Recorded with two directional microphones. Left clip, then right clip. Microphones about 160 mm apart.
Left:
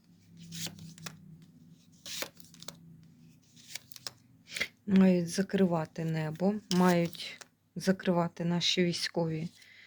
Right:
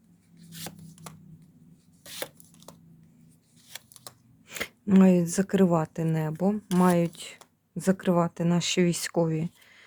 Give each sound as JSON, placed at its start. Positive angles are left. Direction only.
{"t": 2.0, "sound": "chopping", "side_deg": -15}
{"t": 4.4, "sound": "speech", "side_deg": -40}
{"t": 6.1, "sound": "speech", "side_deg": -25}